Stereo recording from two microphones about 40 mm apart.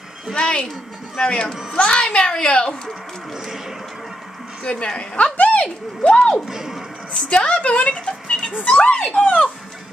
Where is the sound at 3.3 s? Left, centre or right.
Centre.